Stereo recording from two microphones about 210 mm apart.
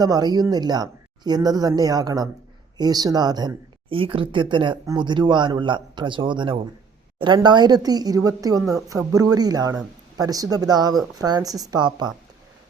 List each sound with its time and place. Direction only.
0.0 s speech: 20° right (ahead or behind)